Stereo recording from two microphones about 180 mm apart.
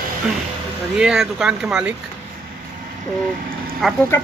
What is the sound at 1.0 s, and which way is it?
Speech, 5° right (ahead or behind).